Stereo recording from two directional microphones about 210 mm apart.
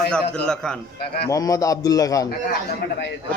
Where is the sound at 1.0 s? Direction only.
50° left (ahead or behind).